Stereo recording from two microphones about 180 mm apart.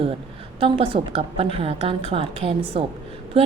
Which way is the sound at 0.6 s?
30° right (ahead or behind).